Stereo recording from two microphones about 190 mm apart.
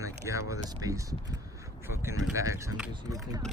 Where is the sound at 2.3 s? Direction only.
15° right (ahead or behind).